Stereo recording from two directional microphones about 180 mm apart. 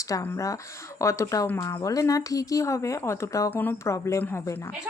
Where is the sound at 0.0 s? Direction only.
15° left (ahead or behind).